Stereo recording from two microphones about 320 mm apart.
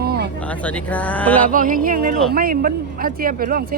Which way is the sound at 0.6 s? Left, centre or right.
Centre.